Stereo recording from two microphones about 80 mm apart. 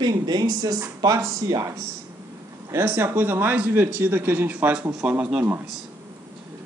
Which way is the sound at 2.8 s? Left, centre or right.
Right.